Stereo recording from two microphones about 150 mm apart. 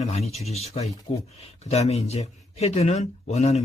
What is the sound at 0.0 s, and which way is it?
Speech, 45° left (ahead or behind).